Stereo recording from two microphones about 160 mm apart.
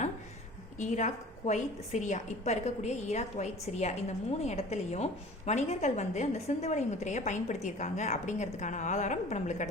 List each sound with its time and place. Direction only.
0.8 s a woman's voice: 50° left (ahead or behind)